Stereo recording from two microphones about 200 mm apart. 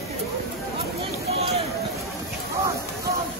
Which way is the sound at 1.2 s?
30° right (ahead or behind).